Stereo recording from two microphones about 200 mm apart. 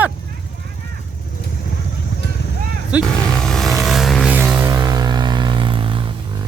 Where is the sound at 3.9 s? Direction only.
Centre (ahead or behind); by 6.0 s 25° right (ahead or behind).